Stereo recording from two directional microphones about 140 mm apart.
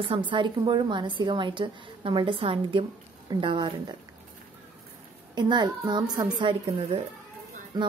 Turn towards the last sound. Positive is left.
turn(degrees=-30)  # may be behind; listen again after turning